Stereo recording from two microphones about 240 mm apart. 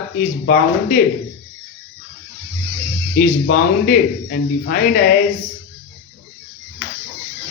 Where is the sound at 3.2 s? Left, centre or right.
Left.